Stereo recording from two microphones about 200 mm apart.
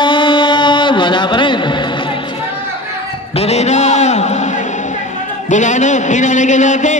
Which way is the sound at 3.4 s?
30° left (ahead or behind).